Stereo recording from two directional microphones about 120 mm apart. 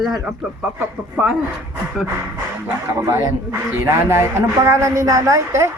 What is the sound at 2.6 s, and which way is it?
Speech, 20° right (ahead or behind).